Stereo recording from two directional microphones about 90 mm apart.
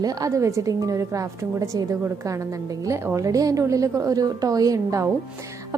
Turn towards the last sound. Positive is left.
turn(degrees=-40)  # may be behind; listen again after turning